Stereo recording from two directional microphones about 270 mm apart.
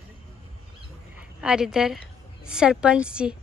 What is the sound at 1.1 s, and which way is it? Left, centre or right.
A woman's voice, centre.